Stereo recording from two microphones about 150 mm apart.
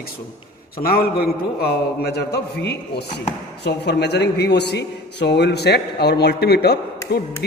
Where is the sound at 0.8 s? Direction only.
80° left.